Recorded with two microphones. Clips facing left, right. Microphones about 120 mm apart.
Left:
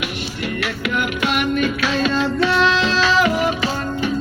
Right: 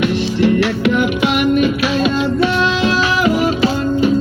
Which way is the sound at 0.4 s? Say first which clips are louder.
Right 10 dB; 30° right (ahead or behind).